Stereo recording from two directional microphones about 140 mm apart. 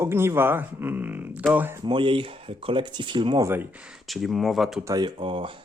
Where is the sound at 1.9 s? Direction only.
35° right (ahead or behind).